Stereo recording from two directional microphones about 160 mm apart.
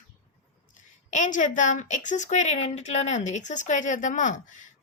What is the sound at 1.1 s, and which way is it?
A woman's voice, 50° left (ahead or behind).